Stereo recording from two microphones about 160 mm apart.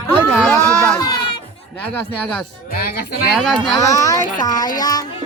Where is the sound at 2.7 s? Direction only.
65° left (ahead or behind).